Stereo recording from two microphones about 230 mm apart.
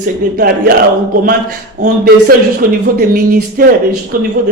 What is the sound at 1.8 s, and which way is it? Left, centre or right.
A man's voice, right.